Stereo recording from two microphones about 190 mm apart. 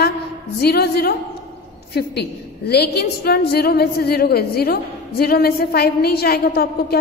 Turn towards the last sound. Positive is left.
turn(degrees=55)  # may be behind; listen again after turning